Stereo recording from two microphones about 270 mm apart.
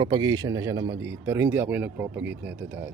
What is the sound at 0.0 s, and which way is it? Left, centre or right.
A man's voice, centre.